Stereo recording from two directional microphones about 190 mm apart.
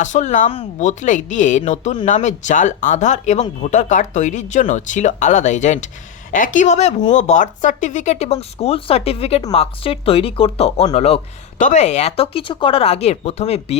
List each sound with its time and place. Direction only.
0.0 s speech: 40° left (ahead or behind)